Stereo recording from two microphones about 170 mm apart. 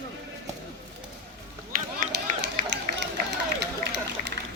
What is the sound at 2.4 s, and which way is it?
Run, 85° right.